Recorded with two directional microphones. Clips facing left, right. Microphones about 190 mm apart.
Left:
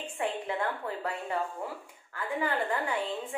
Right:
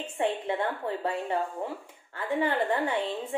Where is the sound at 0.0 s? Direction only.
25° right (ahead or behind).